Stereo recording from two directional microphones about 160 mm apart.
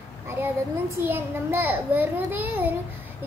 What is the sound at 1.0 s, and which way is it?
A child's voice, 15° right (ahead or behind).